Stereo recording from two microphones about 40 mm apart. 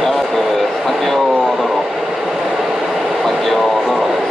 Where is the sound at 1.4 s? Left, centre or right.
Centre.